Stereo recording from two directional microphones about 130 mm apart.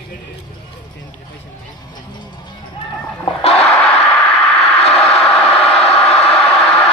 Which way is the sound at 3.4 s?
50° left (ahead or behind).